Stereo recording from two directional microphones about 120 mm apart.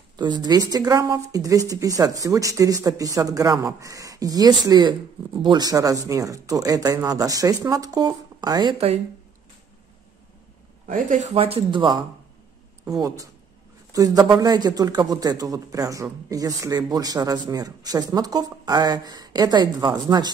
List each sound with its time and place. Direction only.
0.2 s a man's voice: 35° right (ahead or behind)
8.7 s speech: 55° right (ahead or behind)
10.9 s speech: 90° right
11.3 s speech: 50° right (ahead or behind)
12.8 s a man's voice: 30° right (ahead or behind)